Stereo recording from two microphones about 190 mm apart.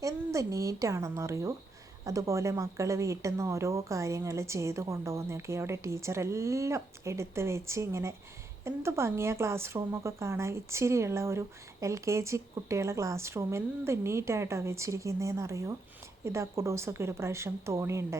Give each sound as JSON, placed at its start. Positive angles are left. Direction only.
{"t": 0.0, "sound": "a woman's voice", "side_deg": -15}